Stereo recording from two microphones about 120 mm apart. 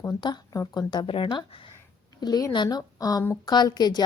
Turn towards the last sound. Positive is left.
turn(degrees=35)  # may be behind; listen again after turning